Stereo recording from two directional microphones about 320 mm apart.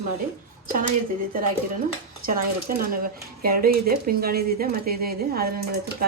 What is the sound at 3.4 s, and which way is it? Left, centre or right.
Speech, right.